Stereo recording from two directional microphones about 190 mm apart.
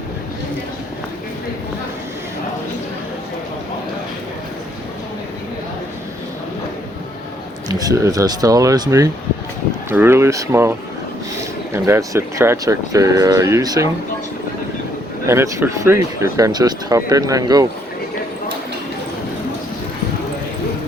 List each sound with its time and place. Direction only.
7.7 s speech: 20° right (ahead or behind)
15.3 s speech: 15° right (ahead or behind)